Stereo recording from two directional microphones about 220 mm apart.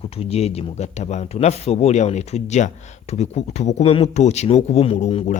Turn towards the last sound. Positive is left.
turn(degrees=30)  # may be behind; listen again after turning